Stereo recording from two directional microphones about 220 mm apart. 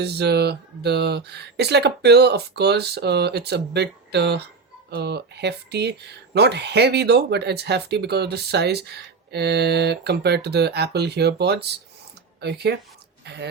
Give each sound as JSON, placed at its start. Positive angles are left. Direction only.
{"t": 0.0, "sound": "speech", "side_deg": -50}